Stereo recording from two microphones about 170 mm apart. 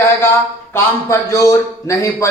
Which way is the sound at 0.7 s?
15° left (ahead or behind).